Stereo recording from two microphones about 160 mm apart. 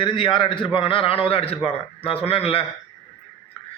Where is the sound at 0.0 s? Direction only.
30° left (ahead or behind).